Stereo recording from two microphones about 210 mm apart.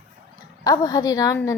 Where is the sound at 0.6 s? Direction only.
15° left (ahead or behind).